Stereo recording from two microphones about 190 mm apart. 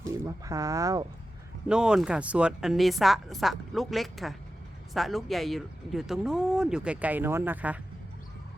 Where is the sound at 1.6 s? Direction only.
5° right (ahead or behind).